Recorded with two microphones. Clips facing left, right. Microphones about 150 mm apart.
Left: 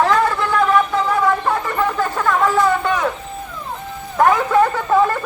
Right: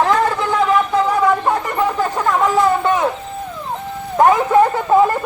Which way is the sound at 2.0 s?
15° right (ahead or behind).